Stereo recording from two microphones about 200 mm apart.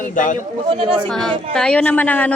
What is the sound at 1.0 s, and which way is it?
A woman's voice, 5° left (ahead or behind).